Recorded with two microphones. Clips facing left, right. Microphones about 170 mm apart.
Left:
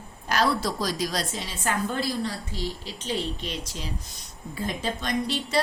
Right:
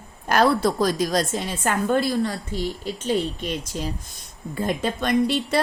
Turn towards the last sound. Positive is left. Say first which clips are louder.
# right 5 dB
turn(degrees=-55)  # may be behind; listen again after turning